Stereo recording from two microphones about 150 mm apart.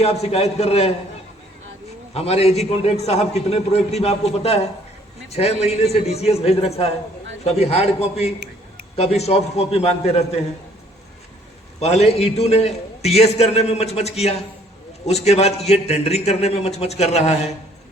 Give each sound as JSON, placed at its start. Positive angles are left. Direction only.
{"t": 0.0, "sound": "a man's voice", "side_deg": 45}
{"t": 2.1, "sound": "a man's voice", "side_deg": 40}
{"t": 11.8, "sound": "a man's voice", "side_deg": 45}